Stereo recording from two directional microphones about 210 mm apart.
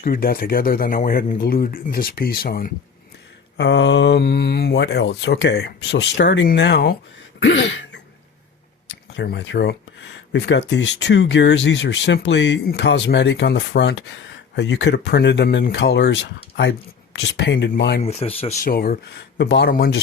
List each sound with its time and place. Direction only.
0.0 s speech: 45° left (ahead or behind)
3.6 s speech: 55° left (ahead or behind)
7.3 s throat clearing: 60° left (ahead or behind)
8.9 s speech: 55° left (ahead or behind)
18.0 s speech: 30° left (ahead or behind)
18.6 s speech: 45° left (ahead or behind)